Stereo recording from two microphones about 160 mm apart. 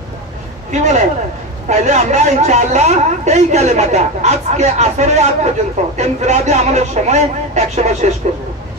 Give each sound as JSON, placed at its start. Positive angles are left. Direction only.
{"t": 0.7, "sound": "a man's voice", "side_deg": -50}